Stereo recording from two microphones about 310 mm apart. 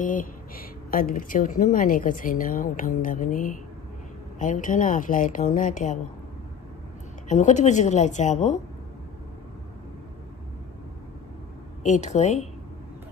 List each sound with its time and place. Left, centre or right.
0.0 s speech: left
7.2 s speech: left
11.8 s speech: left